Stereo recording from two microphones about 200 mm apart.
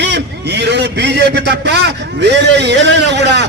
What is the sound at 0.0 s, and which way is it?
A man's voice, 60° right (ahead or behind).